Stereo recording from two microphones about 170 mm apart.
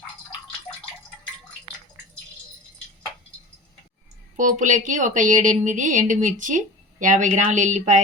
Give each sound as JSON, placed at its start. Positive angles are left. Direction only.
{"t": 4.4, "sound": "a woman's voice", "side_deg": -50}